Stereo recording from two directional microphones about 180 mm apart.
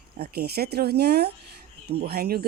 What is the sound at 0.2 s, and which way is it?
Speech, 60° right (ahead or behind).